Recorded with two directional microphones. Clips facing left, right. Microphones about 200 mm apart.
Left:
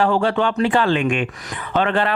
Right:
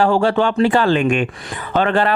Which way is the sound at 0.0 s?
40° right (ahead or behind).